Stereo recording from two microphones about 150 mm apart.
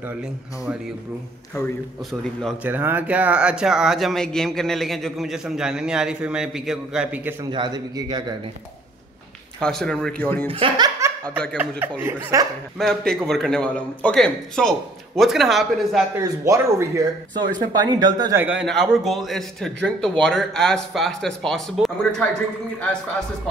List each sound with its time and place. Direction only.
2.6 s speech: 15° right (ahead or behind)
7.5 s a man's voice: 30° right (ahead or behind)
9.6 s speech: 5° left (ahead or behind)
10.5 s speech: 35° right (ahead or behind)
11.5 s speech: 15° right (ahead or behind)
12.7 s speech: centre (ahead or behind)
16.2 s a man's voice: 20° right (ahead or behind)
18.3 s speech: 10° right (ahead or behind)